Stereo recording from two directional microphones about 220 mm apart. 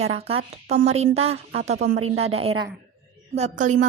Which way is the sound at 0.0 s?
30° right (ahead or behind).